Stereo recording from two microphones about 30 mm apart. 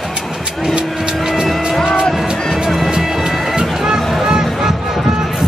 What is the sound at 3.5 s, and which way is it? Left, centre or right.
Music, right.